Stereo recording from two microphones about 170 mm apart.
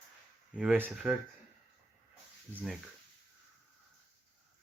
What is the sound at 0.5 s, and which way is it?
Speech, 5° right (ahead or behind).